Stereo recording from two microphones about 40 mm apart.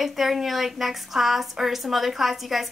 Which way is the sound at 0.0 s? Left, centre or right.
Centre.